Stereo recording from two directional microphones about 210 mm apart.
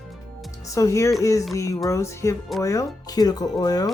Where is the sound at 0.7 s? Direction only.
15° left (ahead or behind).